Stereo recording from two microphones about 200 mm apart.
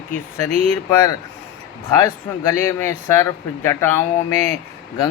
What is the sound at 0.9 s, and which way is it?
Speech, 15° left (ahead or behind).